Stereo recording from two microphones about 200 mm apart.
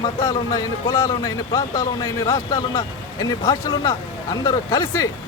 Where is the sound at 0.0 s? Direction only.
20° left (ahead or behind).